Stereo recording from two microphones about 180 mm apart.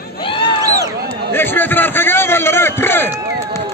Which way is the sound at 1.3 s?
10° left (ahead or behind).